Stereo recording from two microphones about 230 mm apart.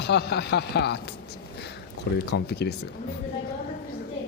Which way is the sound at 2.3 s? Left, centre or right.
Left.